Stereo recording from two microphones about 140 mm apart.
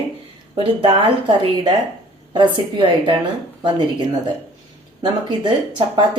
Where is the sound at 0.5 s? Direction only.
40° right (ahead or behind).